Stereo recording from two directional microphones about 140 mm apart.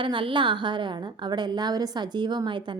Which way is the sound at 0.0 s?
40° right (ahead or behind).